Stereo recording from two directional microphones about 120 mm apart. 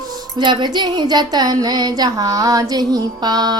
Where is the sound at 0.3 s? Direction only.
40° right (ahead or behind).